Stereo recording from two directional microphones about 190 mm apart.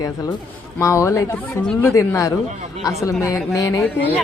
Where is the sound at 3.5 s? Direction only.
20° left (ahead or behind).